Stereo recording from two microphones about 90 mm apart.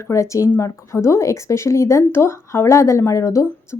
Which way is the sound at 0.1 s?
35° left (ahead or behind).